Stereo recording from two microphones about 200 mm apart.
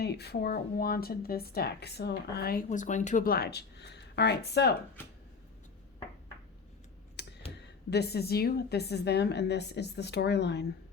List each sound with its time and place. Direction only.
0.0 s speech: 55° left (ahead or behind)
7.2 s computer keyboard: 55° left (ahead or behind)
7.9 s a woman's voice: 55° left (ahead or behind)